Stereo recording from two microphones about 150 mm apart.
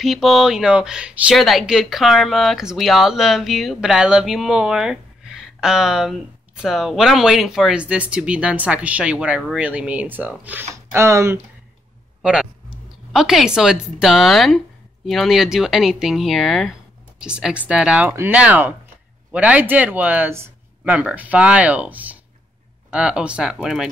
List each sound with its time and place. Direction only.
0.0 s speech: centre (ahead or behind); by 11.4 s 20° right (ahead or behind)
12.2 s a sound: 5° right (ahead or behind)
13.1 s speech: centre (ahead or behind)